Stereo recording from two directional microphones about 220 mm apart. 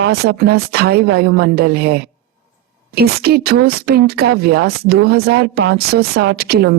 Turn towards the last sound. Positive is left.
turn(degrees=-45)  # may be behind; listen again after turning